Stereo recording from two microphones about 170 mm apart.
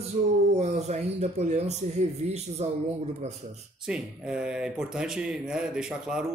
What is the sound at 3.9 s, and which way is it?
A man's voice, 5° right (ahead or behind).